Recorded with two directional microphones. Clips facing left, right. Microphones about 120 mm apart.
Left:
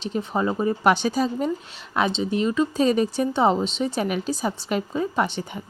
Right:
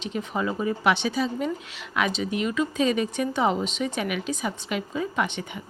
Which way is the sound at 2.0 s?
30° left (ahead or behind).